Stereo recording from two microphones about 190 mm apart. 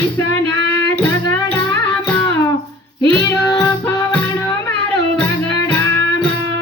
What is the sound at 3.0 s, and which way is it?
Child singing, 20° left (ahead or behind).